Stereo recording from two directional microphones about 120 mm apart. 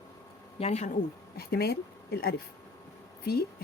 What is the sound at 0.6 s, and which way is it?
Speech, 65° left (ahead or behind).